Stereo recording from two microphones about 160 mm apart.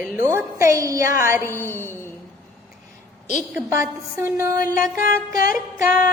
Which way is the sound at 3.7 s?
15° right (ahead or behind).